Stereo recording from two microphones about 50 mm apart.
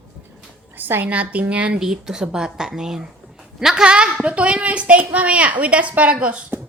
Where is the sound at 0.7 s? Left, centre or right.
Right.